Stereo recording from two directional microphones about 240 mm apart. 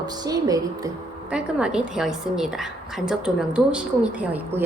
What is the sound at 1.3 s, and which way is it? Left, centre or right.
A woman's voice, centre.